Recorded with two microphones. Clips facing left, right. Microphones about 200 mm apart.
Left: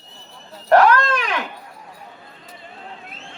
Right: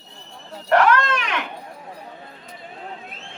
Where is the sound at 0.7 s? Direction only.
35° left (ahead or behind).